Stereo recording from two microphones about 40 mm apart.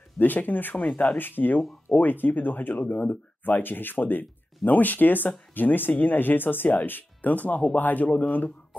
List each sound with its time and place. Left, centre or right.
0.2 s speech: left
1.1 s speech: left